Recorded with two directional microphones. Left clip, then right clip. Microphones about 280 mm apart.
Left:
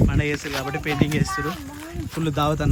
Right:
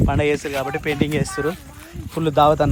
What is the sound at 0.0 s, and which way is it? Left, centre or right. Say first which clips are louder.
Speech: right 5 dB; centre.